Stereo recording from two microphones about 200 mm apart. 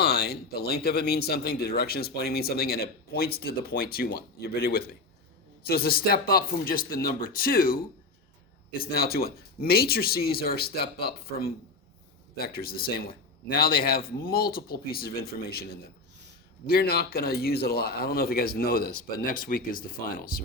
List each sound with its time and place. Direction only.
0.0 s speech: 55° left (ahead or behind)
8.8 s speech: 50° left (ahead or behind)
16.6 s speech: 50° left (ahead or behind)